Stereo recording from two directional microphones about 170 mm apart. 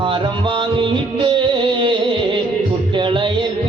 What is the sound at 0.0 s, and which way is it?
Music, 30° right (ahead or behind).